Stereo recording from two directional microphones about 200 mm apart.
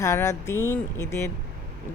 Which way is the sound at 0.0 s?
15° left (ahead or behind).